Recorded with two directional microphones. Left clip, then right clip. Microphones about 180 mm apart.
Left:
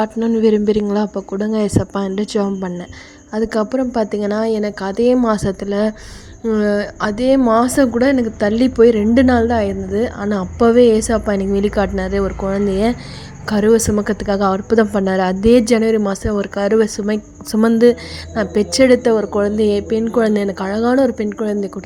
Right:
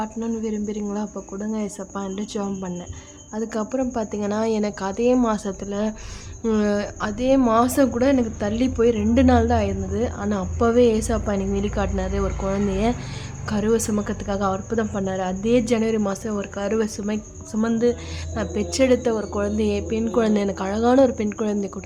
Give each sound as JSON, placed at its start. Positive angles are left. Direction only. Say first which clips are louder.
{"t": 0.0, "sound": "speech", "louder": "left 12 dB", "side_deg": 35}
{"t": 17.5, "sound": "speech", "louder": "left 9 dB", "side_deg": 35}